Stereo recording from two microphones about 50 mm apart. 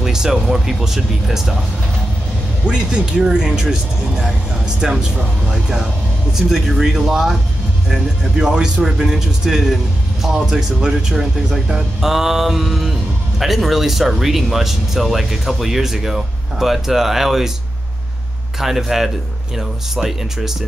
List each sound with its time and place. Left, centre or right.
0.0 s speech: centre
2.6 s speech: centre
18.6 s speech: centre